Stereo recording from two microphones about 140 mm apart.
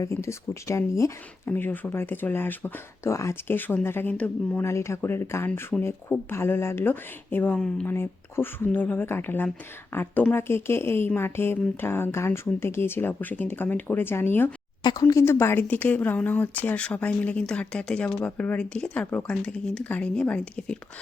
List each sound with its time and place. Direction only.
0.0 s speech: 20° left (ahead or behind)
14.8 s speech: 30° left (ahead or behind); by 20.7 s 5° left (ahead or behind)